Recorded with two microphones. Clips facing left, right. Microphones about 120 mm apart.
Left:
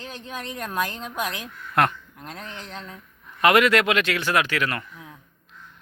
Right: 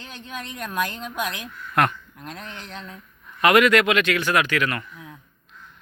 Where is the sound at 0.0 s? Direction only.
35° left (ahead or behind).